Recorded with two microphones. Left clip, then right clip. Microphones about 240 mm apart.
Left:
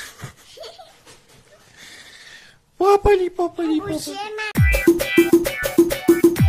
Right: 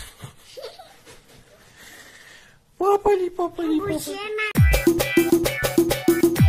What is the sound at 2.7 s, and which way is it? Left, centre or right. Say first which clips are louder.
A man's voice: left 4 dB; left.